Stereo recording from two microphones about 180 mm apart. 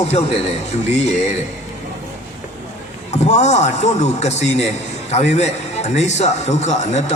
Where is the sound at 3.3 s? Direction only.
40° left (ahead or behind).